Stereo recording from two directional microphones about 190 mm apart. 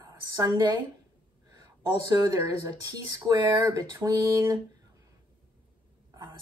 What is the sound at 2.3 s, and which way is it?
Speech, 20° right (ahead or behind).